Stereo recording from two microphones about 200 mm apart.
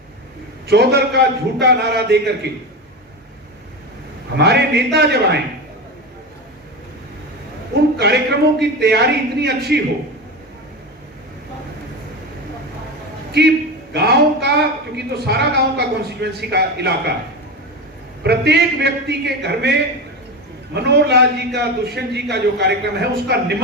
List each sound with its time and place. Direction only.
0.7 s speech: 55° right (ahead or behind)
4.4 s speech: 55° right (ahead or behind)
7.9 s speech: 55° right (ahead or behind)
13.4 s speech: 55° right (ahead or behind)
18.2 s speech: 55° right (ahead or behind)
20.7 s speech: 55° right (ahead or behind)